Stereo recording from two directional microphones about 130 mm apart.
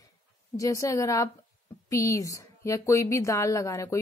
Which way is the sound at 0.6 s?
25° left (ahead or behind).